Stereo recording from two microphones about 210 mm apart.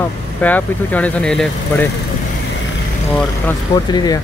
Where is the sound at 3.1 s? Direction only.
10° left (ahead or behind).